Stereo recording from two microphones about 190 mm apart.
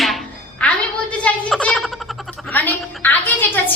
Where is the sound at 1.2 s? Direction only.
5° left (ahead or behind).